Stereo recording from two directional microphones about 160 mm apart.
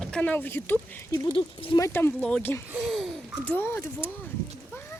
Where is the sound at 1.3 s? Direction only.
30° left (ahead or behind).